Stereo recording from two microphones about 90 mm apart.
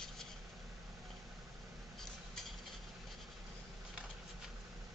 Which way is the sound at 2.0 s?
5° left (ahead or behind).